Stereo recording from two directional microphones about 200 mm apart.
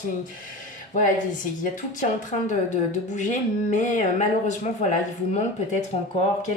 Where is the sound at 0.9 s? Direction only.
40° left (ahead or behind).